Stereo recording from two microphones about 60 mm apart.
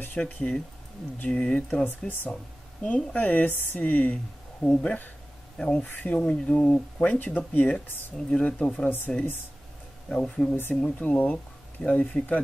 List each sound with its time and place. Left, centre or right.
0.2 s speech: centre
2.0 s speech: left
2.8 s speech: left
5.6 s speech: centre
5.9 s speech: left
11.0 s speech: left